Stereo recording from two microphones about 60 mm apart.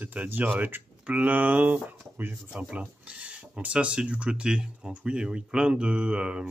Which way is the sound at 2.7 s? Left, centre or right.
Centre.